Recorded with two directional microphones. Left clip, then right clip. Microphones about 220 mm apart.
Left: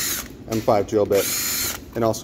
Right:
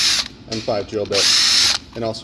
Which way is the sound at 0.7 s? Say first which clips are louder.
Left 3 dB; 15° left (ahead or behind).